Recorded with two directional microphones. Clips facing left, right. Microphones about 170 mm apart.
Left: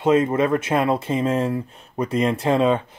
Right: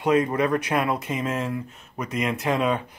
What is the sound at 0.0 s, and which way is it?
Speech, 25° left (ahead or behind).